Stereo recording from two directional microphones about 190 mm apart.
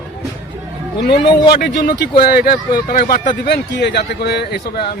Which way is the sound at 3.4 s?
60° left (ahead or behind).